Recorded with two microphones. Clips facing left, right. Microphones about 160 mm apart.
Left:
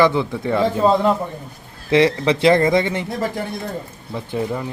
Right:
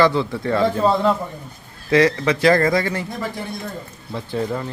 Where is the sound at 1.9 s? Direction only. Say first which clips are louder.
Left 1 dB; 25° left (ahead or behind).